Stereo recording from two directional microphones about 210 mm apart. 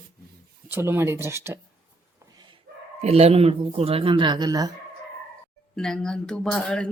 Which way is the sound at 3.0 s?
30° right (ahead or behind).